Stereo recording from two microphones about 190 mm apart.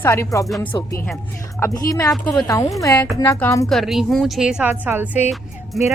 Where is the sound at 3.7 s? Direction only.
Centre (ahead or behind).